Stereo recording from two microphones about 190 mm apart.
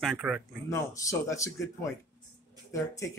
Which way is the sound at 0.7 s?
15° left (ahead or behind).